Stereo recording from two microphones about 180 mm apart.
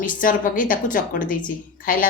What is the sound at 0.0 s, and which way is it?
Speech, 50° left (ahead or behind).